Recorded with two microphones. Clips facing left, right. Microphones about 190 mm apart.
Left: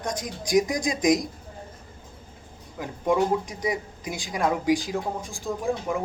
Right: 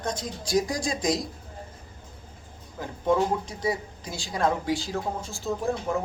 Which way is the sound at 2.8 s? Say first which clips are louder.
Left 1 dB; 15° left (ahead or behind).